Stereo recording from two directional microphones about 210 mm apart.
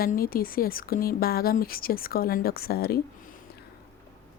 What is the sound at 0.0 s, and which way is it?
A woman's voice, 45° left (ahead or behind).